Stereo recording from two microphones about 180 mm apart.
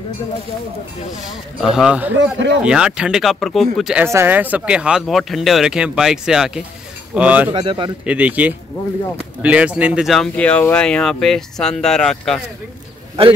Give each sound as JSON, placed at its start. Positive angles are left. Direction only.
{"t": 1.6, "sound": "speech", "side_deg": 0}
{"t": 2.1, "sound": "speech", "side_deg": -85}
{"t": 2.6, "sound": "speech", "side_deg": -5}
{"t": 7.5, "sound": "a man's voice", "side_deg": -25}
{"t": 8.0, "sound": "speech", "side_deg": -5}